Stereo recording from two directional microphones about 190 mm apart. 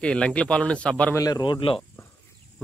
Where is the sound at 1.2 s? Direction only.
20° left (ahead or behind).